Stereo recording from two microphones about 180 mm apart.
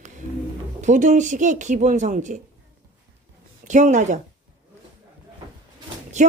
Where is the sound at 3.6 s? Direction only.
40° right (ahead or behind).